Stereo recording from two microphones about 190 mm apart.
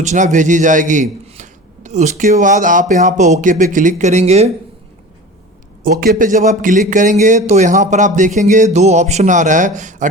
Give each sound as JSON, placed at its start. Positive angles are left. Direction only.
{"t": 0.0, "sound": "speech", "side_deg": -40}
{"t": 6.1, "sound": "speech", "side_deg": -40}